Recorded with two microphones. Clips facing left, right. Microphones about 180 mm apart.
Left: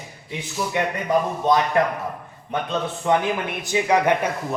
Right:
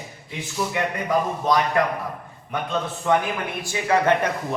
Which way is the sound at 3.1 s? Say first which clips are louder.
Left 1 dB; 20° left (ahead or behind).